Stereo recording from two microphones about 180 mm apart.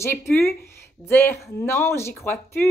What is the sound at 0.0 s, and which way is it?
A woman's voice, 15° left (ahead or behind).